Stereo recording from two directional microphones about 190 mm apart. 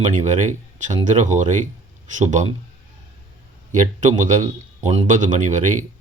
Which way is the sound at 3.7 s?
40° right (ahead or behind).